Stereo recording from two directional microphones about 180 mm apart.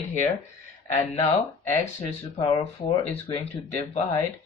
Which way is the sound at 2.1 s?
35° left (ahead or behind).